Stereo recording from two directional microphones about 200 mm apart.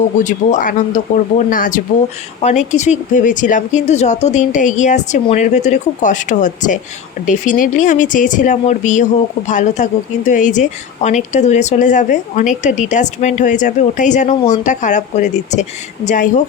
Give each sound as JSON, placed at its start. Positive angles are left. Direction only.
{"t": 0.3, "sound": "speech", "side_deg": 40}